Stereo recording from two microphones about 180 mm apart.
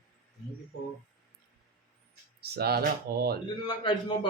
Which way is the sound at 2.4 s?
60° right (ahead or behind).